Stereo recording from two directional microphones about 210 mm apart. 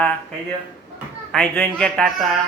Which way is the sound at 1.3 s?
Centre (ahead or behind).